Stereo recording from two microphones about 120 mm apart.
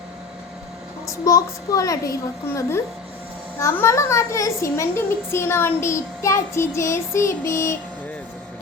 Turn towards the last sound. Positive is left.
turn(degrees=20)  # may be behind; listen again after turning